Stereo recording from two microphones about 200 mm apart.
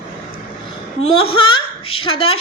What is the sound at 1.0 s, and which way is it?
Speech, 30° left (ahead or behind).